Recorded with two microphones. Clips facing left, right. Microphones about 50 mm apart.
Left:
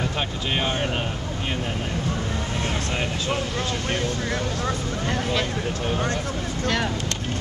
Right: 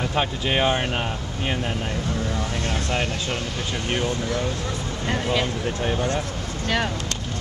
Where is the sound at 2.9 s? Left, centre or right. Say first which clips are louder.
Right 1 dB; centre.